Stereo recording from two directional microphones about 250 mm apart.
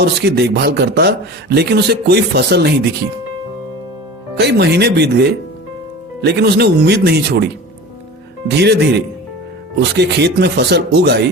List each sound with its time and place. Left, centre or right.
0.0 s a man's voice: right
4.4 s a man's voice: right
8.4 s a man's voice: right
9.9 s a man's voice: right